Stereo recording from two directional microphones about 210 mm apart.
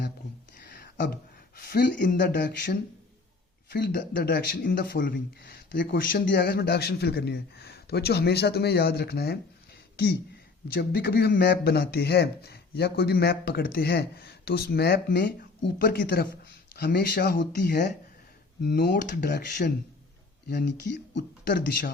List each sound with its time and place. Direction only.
0.6 s speech: 50° left (ahead or behind)
10.8 s speech: 50° left (ahead or behind)